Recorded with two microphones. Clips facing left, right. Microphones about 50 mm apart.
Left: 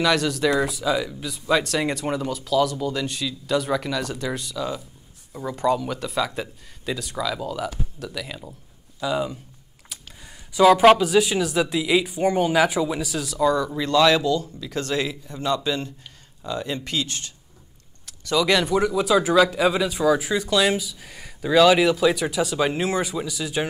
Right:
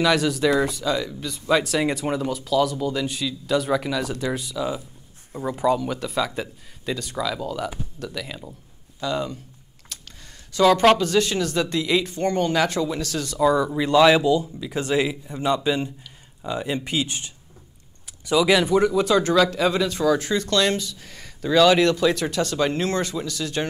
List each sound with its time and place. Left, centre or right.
0.0 s speech: centre
5.6 s speech: centre
9.9 s a sound: centre
10.5 s speech: centre
13.4 s speech: centre